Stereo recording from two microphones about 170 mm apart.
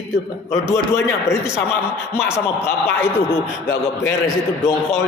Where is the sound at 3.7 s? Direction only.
75° left (ahead or behind).